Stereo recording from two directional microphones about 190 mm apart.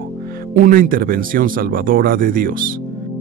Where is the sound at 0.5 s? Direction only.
45° right (ahead or behind).